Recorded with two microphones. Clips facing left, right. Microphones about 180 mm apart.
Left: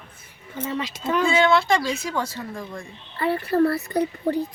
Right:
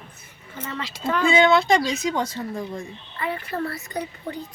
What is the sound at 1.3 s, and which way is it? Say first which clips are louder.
A woman's voice: right 3 dB; 20° right (ahead or behind).